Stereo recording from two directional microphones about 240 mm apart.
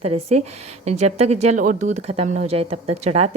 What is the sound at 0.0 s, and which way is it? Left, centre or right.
A woman's voice, right.